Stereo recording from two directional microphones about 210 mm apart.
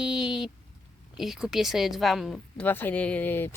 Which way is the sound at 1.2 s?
Centre (ahead or behind).